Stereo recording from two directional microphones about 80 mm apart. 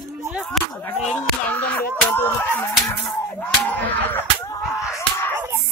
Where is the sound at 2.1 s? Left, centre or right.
Left.